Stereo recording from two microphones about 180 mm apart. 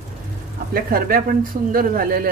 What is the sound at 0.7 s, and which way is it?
Speech, 55° right (ahead or behind).